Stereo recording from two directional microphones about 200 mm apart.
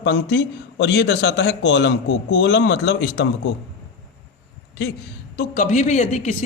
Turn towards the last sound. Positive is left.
turn(degrees=35)  # may be behind; listen again after turning